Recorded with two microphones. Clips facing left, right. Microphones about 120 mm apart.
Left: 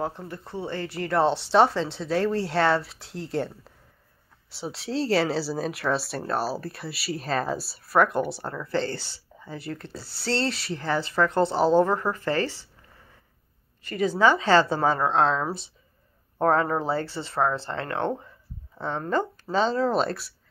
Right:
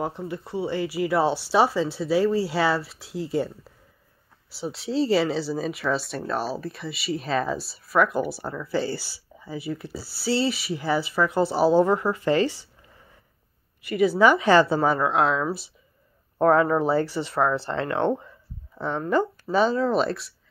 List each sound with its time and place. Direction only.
0.0 s speech: 15° right (ahead or behind)
13.8 s a woman's voice: 10° right (ahead or behind)